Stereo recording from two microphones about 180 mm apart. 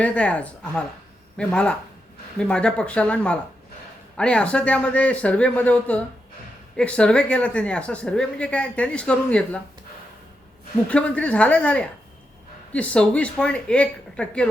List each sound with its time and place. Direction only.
0.0 s a woman's voice: 5° left (ahead or behind)
10.8 s a woman's voice: 5° left (ahead or behind)